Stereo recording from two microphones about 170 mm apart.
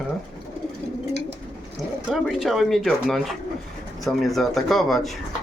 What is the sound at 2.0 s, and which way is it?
Speech, centre (ahead or behind).